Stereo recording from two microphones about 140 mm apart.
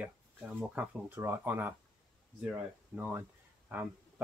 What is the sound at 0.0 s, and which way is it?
Speech, 10° right (ahead or behind).